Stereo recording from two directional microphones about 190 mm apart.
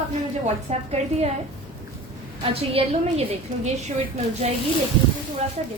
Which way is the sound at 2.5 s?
30° right (ahead or behind).